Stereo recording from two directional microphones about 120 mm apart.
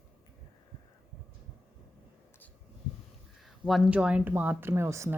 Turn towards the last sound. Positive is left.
turn(degrees=-20)  # may be behind; listen again after turning